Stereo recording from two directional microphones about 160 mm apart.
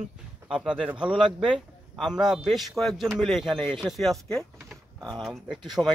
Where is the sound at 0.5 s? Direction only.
5° right (ahead or behind).